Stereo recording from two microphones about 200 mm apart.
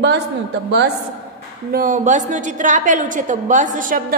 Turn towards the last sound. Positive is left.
turn(degrees=-40)  # may be behind; listen again after turning